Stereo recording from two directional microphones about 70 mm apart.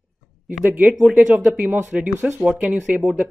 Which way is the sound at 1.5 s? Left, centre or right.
Right.